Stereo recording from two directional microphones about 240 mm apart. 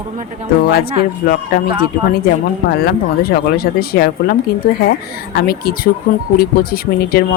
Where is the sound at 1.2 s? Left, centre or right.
Left.